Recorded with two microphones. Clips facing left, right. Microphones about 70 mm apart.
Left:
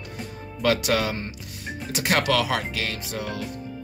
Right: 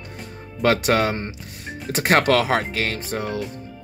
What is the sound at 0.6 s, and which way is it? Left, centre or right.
Speech, right.